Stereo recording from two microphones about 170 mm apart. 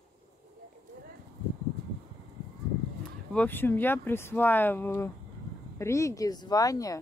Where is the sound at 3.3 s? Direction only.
10° left (ahead or behind).